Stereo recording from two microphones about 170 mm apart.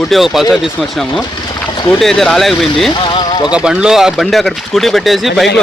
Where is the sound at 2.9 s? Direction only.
25° left (ahead or behind).